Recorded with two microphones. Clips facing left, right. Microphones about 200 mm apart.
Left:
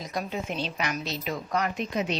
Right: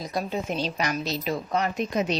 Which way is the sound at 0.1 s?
35° right (ahead or behind).